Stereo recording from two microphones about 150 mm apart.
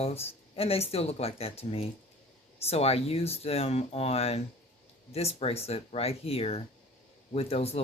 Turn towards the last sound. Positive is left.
turn(degrees=40)  # may be behind; listen again after turning